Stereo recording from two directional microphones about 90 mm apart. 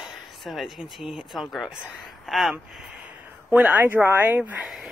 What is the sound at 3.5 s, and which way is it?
Speech, 20° right (ahead or behind).